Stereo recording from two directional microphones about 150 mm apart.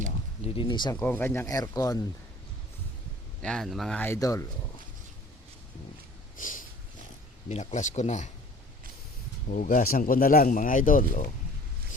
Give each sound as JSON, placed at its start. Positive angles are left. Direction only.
{"t": 0.4, "sound": "speech", "side_deg": 35}
{"t": 0.9, "sound": "speech", "side_deg": 15}
{"t": 3.4, "sound": "speech", "side_deg": 5}
{"t": 4.0, "sound": "speech", "side_deg": 20}
{"t": 6.3, "sound": "sniff", "side_deg": 60}
{"t": 7.4, "sound": "speech", "side_deg": 50}
{"t": 9.5, "sound": "speech", "side_deg": 60}